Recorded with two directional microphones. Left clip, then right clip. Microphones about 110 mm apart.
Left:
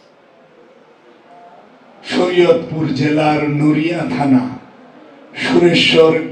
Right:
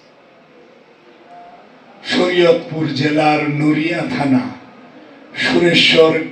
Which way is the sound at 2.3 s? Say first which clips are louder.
Left 2 dB; 20° left (ahead or behind).